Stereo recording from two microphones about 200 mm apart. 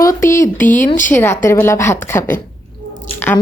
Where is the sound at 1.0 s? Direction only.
10° left (ahead or behind).